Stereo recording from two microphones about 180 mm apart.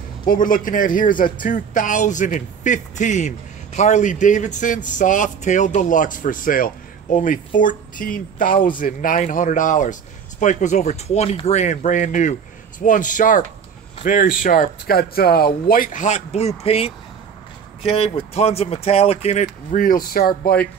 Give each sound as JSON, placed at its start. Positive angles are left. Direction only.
{"t": 0.3, "sound": "a man's voice", "side_deg": 50}